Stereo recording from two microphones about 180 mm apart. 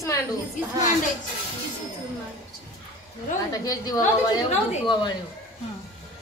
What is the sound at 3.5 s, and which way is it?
A woman's voice, 20° left (ahead or behind).